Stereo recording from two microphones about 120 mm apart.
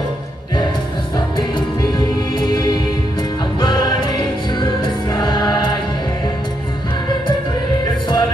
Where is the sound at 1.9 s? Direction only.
35° left (ahead or behind).